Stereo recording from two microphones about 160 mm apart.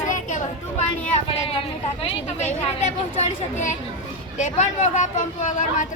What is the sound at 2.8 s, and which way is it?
Speech, 45° left (ahead or behind).